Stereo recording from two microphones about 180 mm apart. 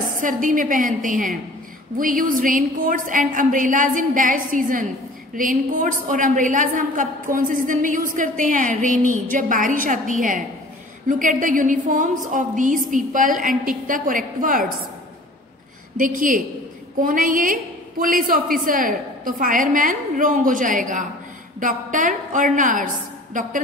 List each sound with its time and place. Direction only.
0.2 s a woman's voice: 45° right (ahead or behind)
16.0 s a woman's voice: 50° right (ahead or behind)